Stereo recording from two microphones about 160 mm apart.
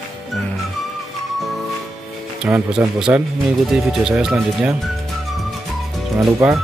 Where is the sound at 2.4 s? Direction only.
5° right (ahead or behind).